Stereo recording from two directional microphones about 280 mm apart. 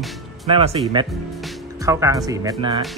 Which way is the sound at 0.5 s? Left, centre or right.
Centre.